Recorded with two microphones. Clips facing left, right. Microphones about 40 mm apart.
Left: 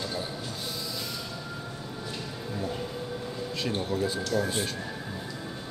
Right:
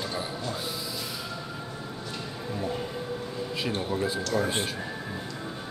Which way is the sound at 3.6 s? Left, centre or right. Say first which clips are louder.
Even; centre.